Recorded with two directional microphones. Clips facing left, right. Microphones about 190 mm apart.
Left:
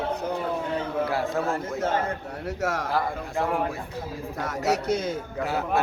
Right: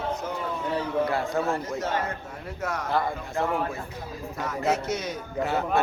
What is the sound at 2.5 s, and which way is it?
Speech, 90° left.